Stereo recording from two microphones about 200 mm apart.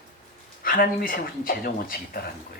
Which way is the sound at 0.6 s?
45° left (ahead or behind).